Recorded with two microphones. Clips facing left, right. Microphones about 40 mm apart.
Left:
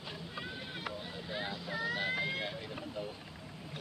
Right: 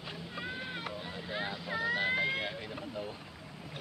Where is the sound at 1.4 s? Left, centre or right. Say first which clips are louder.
Right 3 dB; right.